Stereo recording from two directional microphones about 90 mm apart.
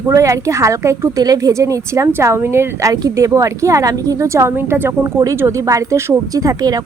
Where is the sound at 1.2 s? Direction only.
45° right (ahead or behind).